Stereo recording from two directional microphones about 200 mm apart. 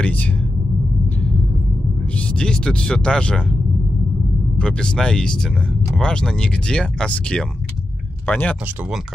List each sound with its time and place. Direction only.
0.0 s speech: 10° left (ahead or behind)
2.1 s speech: 5° left (ahead or behind)
4.6 s speech: 5° left (ahead or behind)